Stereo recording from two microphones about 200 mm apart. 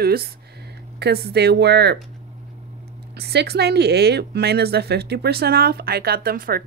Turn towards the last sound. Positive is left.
turn(degrees=-45)  # may be behind; listen again after turning